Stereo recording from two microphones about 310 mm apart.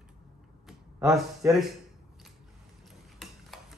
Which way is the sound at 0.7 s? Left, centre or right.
Centre.